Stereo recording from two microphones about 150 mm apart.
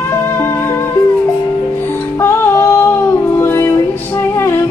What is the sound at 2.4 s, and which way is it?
Music, 15° left (ahead or behind).